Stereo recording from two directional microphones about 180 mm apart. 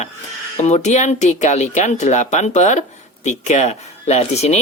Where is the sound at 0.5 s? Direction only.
40° left (ahead or behind).